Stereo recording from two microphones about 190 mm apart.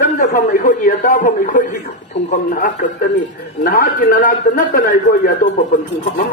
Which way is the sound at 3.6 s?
45° left (ahead or behind).